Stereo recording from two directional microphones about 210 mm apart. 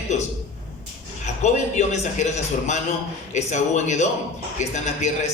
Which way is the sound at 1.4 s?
35° left (ahead or behind).